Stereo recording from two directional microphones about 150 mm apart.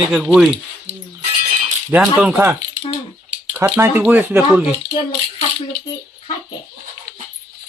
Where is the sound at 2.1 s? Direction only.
10° right (ahead or behind).